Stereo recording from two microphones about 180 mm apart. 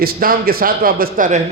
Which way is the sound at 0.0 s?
55° right (ahead or behind).